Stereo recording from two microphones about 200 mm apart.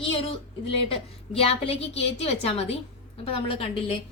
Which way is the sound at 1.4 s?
30° left (ahead or behind).